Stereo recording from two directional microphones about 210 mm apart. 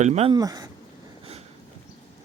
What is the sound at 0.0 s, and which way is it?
Speech, 30° right (ahead or behind).